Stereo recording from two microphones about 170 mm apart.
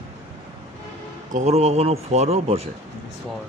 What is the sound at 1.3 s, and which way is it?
Speech, 40° right (ahead or behind).